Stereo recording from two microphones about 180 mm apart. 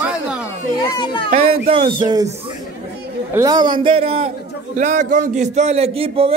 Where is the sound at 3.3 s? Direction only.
20° right (ahead or behind).